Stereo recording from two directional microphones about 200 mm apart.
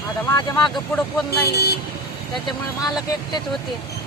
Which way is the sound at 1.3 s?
50° left (ahead or behind).